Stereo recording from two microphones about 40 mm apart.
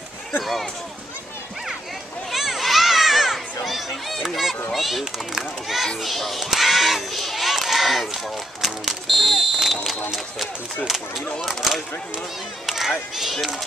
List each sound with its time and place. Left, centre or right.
0.4 s speech: centre
2.3 s children playing: centre
4.7 s speech: centre
5.9 s crowd: centre
8.1 s speech: centre
11.4 s a child's voice: centre